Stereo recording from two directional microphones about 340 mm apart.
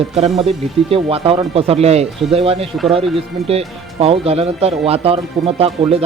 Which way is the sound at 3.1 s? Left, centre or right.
Centre.